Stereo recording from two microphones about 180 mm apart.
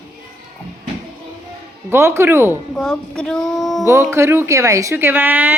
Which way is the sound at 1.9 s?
15° right (ahead or behind).